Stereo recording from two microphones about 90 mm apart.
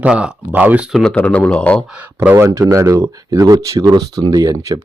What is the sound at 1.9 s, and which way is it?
Speech, 20° right (ahead or behind).